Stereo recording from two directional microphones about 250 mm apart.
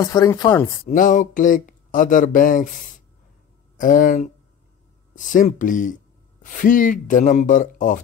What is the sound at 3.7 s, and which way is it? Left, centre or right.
Speech, left.